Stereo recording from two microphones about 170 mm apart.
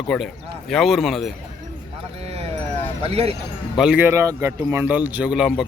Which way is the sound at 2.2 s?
35° right (ahead or behind).